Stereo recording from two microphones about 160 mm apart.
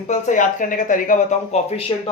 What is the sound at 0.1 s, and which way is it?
Speech, 50° left (ahead or behind).